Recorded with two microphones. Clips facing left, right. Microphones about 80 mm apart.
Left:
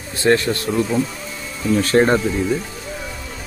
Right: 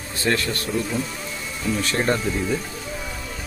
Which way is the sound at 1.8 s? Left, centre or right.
Left.